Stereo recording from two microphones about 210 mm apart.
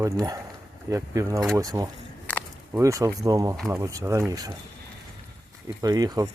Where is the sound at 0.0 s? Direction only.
15° right (ahead or behind).